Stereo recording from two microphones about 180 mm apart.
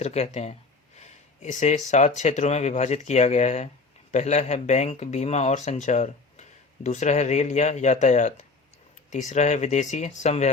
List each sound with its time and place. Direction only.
0.0 s speech: 35° left (ahead or behind)
0.9 s a sound: 40° left (ahead or behind)
1.9 s speech: 40° left (ahead or behind)